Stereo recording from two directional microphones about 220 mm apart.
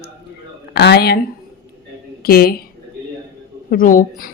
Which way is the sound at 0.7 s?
50° left (ahead or behind).